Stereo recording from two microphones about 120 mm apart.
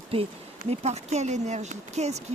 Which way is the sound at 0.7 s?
65° right (ahead or behind).